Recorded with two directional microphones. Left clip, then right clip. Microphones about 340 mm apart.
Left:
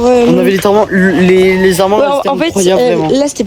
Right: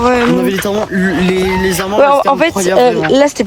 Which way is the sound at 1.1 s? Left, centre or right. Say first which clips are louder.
Left 6 dB; left.